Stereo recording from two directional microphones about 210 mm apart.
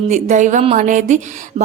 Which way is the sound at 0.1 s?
35° right (ahead or behind).